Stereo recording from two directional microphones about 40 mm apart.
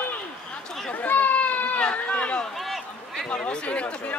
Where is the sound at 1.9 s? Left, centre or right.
Left.